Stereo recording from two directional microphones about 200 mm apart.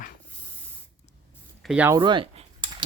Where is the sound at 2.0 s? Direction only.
25° right (ahead or behind).